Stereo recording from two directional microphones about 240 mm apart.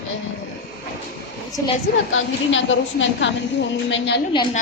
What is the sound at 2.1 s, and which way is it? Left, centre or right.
A woman's voice, left.